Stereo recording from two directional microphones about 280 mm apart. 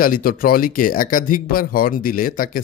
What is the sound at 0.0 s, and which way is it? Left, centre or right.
Speech, left.